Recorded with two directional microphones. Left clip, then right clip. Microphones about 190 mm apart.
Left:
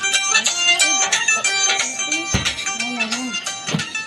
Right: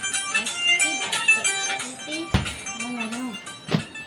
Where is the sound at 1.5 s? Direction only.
40° left (ahead or behind).